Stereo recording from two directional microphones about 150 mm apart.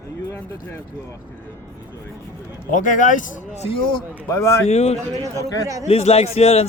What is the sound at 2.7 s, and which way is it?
Speech, 60° left (ahead or behind).